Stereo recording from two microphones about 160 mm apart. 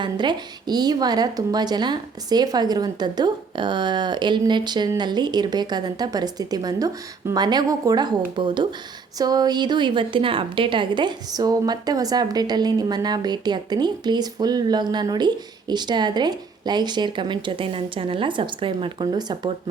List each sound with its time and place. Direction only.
0.0 s a woman's voice: 30° right (ahead or behind)